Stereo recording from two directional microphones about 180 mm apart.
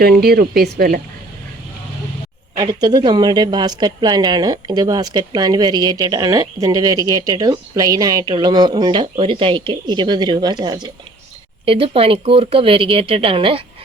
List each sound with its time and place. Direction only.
0.0 s speech: 60° right (ahead or behind)
2.6 s a woman's voice: 20° right (ahead or behind)